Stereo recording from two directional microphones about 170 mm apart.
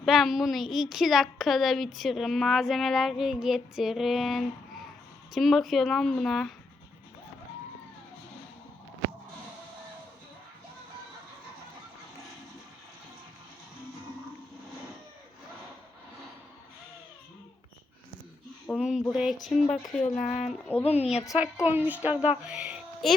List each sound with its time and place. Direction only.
0.0 s speech: centre (ahead or behind)
18.7 s a sound: 5° right (ahead or behind)
19.1 s speech: 5° right (ahead or behind)
20.1 s a woman's voice: 40° left (ahead or behind)
21.3 s a woman's voice: 5° right (ahead or behind)